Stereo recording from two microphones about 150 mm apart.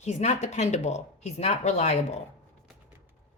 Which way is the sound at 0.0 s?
50° left (ahead or behind).